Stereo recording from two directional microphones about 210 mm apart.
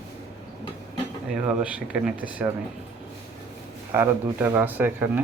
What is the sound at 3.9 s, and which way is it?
Speech, 10° right (ahead or behind).